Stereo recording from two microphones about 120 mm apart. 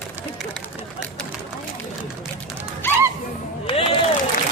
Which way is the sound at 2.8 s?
20° left (ahead or behind).